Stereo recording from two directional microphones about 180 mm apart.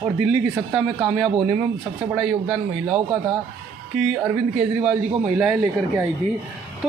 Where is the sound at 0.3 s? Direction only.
5° right (ahead or behind).